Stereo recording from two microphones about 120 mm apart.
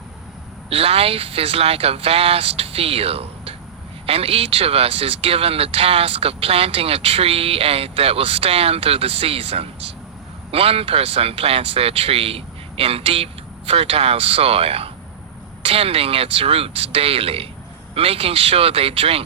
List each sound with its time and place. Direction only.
0.7 s speech: 55° right (ahead or behind)